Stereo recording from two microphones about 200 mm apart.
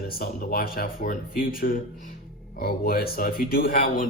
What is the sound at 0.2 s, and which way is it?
Speech, 45° left (ahead or behind).